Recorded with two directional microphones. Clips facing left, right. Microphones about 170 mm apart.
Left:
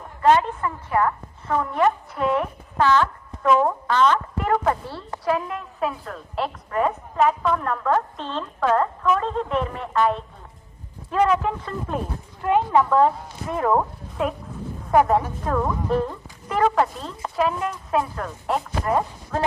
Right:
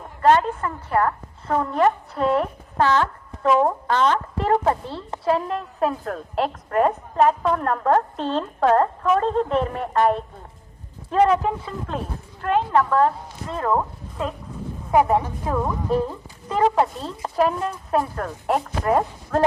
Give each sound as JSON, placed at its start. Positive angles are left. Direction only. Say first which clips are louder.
{"t": 0.2, "sound": "a woman's voice", "louder": "right 1 dB", "side_deg": -45}
{"t": 1.5, "sound": "a woman's voice", "louder": "right 1 dB", "side_deg": -30}
{"t": 6.1, "sound": "a woman's voice", "louder": "right 4 dB", "side_deg": -50}
{"t": 11.1, "sound": "a woman's voice", "louder": "right 3 dB", "side_deg": -30}
{"t": 11.9, "sound": "speech", "louder": "left 2 dB", "side_deg": 10}
{"t": 14.8, "sound": "a woman's voice", "louder": "even", "side_deg": -10}
{"t": 17.2, "sound": "a woman's voice", "louder": "right 2 dB", "side_deg": -40}
{"t": 18.2, "sound": "speech", "louder": "right 2 dB", "side_deg": -45}